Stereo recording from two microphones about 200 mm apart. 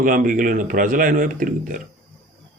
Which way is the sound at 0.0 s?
45° right (ahead or behind).